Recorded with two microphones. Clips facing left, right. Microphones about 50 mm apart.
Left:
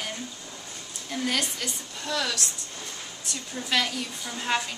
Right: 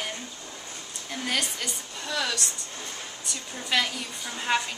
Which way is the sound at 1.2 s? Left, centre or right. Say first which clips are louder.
Even; centre.